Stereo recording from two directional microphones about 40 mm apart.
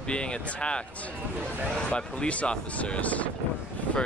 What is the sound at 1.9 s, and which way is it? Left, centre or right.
Speech, left.